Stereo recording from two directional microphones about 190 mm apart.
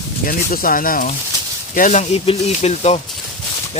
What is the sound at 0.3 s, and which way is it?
Speech, 45° left (ahead or behind).